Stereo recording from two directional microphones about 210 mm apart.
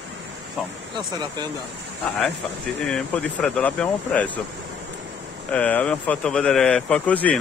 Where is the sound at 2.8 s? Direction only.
5° left (ahead or behind).